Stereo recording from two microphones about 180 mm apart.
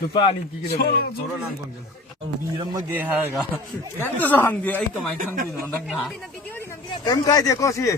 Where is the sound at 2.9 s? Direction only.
10° right (ahead or behind).